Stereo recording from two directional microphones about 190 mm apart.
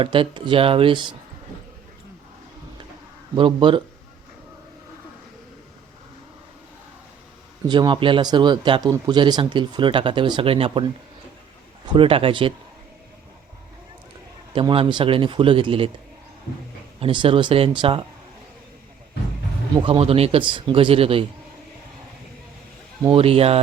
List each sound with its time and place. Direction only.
0.0 s speech: 25° right (ahead or behind)
3.3 s speech: 25° right (ahead or behind)
7.7 s speech: 25° right (ahead or behind)
11.9 s speech: 30° right (ahead or behind)
14.5 s speech: 30° right (ahead or behind)
17.0 s speech: 25° right (ahead or behind)
19.7 s speech: 30° right (ahead or behind)
23.1 s speech: 30° right (ahead or behind)